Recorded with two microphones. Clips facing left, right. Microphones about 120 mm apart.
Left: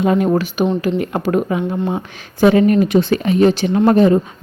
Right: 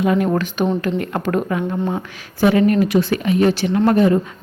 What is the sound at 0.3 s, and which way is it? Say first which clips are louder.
Speech: left 3 dB; 15° left (ahead or behind).